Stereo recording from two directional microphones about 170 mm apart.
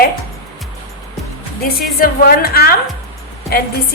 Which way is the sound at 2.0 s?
65° left (ahead or behind).